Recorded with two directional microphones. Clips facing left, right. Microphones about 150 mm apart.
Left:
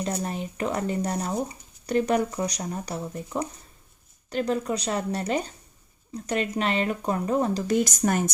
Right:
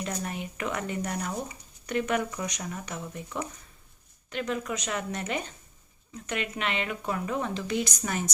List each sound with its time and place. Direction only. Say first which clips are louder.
0.0 s speech: left 4 dB; 35° left (ahead or behind)